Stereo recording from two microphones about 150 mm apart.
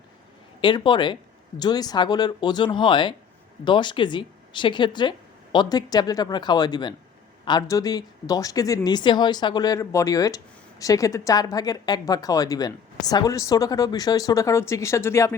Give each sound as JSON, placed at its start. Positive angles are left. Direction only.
{"t": 0.6, "sound": "speech", "side_deg": 30}